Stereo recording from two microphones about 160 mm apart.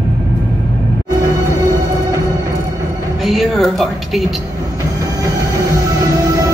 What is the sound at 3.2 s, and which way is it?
A woman's voice, centre (ahead or behind).